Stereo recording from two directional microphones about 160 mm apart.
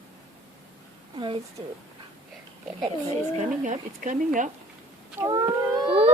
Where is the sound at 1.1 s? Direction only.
30° right (ahead or behind).